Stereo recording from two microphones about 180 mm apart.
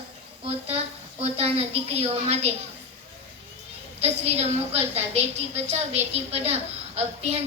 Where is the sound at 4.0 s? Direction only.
35° right (ahead or behind).